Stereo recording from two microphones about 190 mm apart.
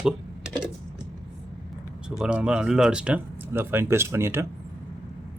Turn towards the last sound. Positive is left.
turn(degrees=-15)  # may be behind; listen again after turning